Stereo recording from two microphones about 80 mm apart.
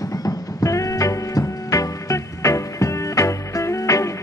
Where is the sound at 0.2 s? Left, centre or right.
Left.